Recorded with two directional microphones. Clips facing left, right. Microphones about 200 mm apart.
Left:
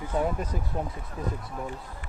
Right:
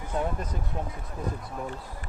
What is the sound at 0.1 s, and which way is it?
Speech, 10° left (ahead or behind).